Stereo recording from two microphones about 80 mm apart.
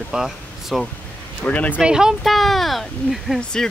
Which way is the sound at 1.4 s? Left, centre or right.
Centre.